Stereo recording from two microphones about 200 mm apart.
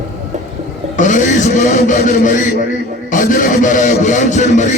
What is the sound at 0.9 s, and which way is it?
A man's voice, 40° left (ahead or behind).